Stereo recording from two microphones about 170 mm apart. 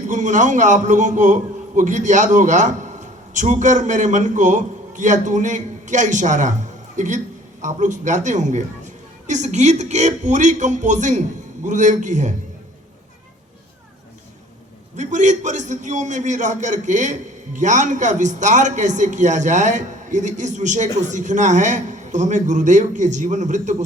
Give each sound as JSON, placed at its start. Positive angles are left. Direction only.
{"t": 0.1, "sound": "a man's voice", "side_deg": -45}
{"t": 14.9, "sound": "a man's voice", "side_deg": -45}